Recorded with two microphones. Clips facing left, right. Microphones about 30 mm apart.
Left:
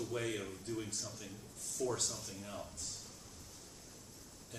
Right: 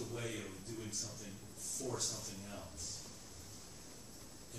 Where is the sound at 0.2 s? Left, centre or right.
Centre.